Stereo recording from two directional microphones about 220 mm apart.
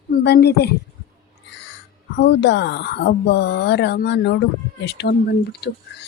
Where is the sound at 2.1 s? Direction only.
50° left (ahead or behind).